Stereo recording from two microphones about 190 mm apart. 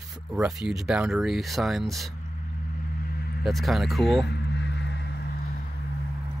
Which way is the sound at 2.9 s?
50° left (ahead or behind).